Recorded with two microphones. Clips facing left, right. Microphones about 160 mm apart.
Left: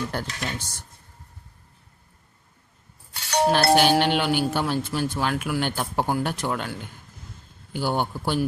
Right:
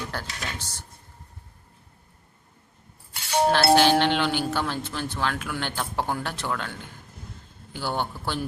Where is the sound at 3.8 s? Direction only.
15° left (ahead or behind).